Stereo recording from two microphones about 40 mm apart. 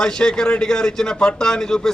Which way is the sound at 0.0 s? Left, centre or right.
Centre.